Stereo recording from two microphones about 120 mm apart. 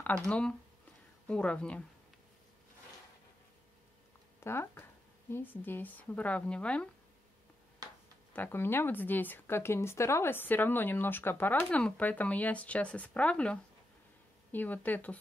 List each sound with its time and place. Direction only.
0.3 s speech: 10° left (ahead or behind)
4.4 s speech: 20° left (ahead or behind)
8.3 s speech: 15° left (ahead or behind)